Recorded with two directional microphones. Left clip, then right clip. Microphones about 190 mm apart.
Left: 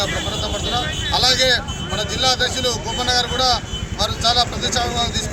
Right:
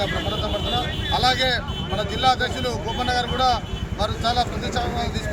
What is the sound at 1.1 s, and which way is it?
Speech, 10° right (ahead or behind).